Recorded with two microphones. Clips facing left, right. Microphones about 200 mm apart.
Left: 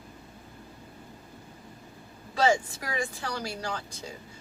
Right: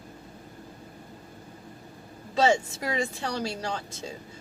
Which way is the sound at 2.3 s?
25° right (ahead or behind).